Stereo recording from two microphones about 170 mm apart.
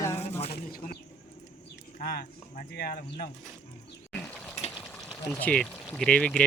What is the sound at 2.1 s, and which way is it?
Speech, 65° left (ahead or behind).